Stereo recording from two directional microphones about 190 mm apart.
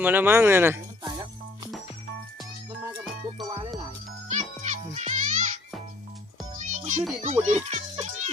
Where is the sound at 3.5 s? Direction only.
25° right (ahead or behind).